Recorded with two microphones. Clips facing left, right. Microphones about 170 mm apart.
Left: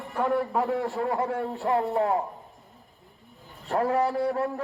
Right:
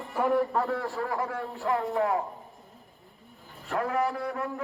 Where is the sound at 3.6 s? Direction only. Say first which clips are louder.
Left 4 dB; 35° left (ahead or behind).